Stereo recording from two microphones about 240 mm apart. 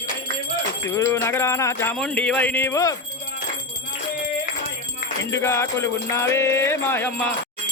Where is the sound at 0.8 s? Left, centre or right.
Centre.